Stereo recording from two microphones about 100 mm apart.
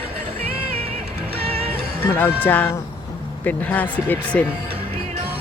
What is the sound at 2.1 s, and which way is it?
Speech, 20° left (ahead or behind).